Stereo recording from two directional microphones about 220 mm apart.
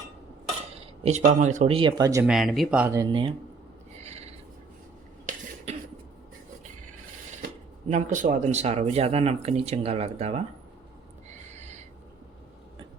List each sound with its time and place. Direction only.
1.0 s speech: 30° right (ahead or behind)
2.2 s speech: centre (ahead or behind); by 3.3 s 20° right (ahead or behind)
7.9 s speech: 35° right (ahead or behind)
11.3 s a sound: 30° right (ahead or behind)